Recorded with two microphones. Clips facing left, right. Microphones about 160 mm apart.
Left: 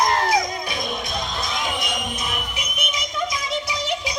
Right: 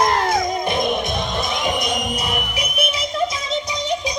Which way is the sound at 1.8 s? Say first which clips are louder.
Right 5 dB; 35° right (ahead or behind).